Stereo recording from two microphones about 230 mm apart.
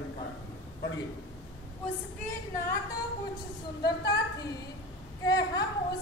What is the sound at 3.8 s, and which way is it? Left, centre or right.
A woman's voice, centre.